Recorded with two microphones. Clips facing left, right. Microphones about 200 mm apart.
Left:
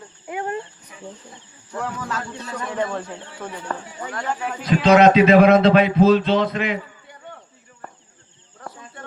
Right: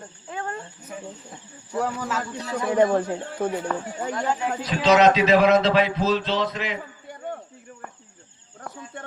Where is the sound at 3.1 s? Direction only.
45° right (ahead or behind).